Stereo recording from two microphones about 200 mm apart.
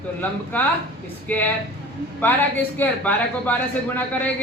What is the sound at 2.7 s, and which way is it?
A man's voice, 10° left (ahead or behind).